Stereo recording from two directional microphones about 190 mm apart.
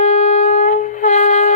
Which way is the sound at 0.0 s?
40° left (ahead or behind).